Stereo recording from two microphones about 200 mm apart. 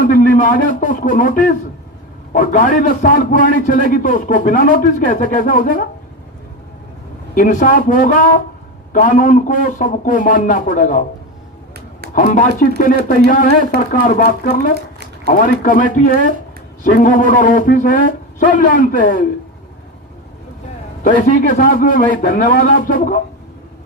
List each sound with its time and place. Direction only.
0.1 s a man's voice: 40° left (ahead or behind)
7.3 s a man's voice: 40° left (ahead or behind)
12.1 s speech: 40° left (ahead or behind)
21.0 s speech: 40° left (ahead or behind)